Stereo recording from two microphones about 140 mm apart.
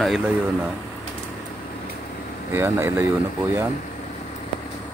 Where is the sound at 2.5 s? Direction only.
15° right (ahead or behind).